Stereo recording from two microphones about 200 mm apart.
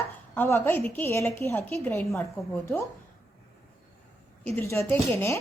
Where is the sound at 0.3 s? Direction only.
10° left (ahead or behind).